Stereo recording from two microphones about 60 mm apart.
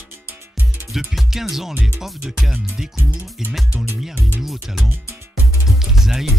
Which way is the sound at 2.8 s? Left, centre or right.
Centre.